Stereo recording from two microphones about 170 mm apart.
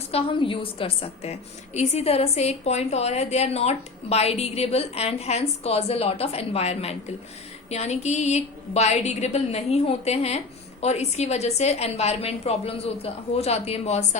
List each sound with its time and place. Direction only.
0.1 s a woman's voice: 35° left (ahead or behind)